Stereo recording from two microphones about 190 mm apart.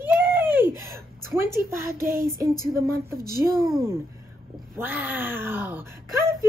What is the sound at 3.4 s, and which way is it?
Speech, 15° right (ahead or behind).